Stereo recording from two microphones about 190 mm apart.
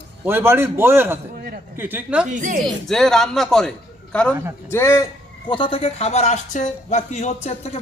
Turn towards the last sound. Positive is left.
turn(degrees=35)  # may be behind; listen again after turning